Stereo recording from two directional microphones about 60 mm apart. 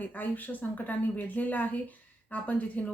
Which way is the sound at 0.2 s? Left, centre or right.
Left.